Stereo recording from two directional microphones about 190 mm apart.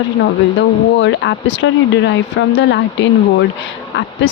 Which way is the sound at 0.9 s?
75° left (ahead or behind).